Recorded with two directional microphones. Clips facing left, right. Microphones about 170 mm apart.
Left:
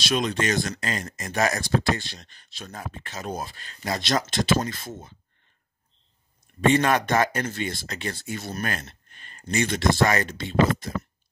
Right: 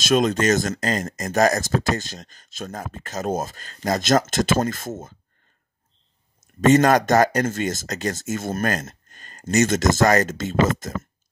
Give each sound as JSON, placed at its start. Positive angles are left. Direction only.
{"t": 0.0, "sound": "speech", "side_deg": -45}
{"t": 6.6, "sound": "speech", "side_deg": -40}